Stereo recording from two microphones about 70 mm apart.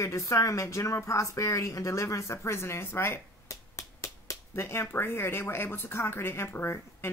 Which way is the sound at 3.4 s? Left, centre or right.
Left.